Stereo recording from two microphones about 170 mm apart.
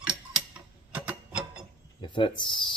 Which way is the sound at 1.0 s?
10° right (ahead or behind).